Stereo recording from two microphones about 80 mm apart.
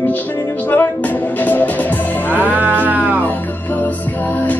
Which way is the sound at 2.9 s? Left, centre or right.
Right.